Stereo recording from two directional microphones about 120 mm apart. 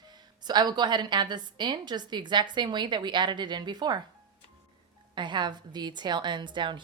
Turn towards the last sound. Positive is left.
turn(degrees=-40)  # may be behind; listen again after turning